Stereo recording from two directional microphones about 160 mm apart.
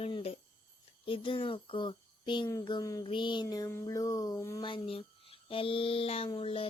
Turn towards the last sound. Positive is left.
turn(degrees=35)  # may be behind; listen again after turning